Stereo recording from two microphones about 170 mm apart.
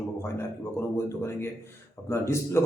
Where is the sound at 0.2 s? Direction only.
15° left (ahead or behind).